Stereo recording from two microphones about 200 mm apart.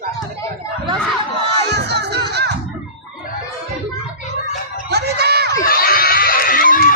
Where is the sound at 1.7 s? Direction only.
55° right (ahead or behind).